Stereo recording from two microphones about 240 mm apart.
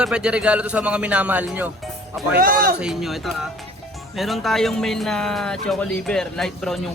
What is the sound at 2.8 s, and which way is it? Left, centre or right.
Speech, centre.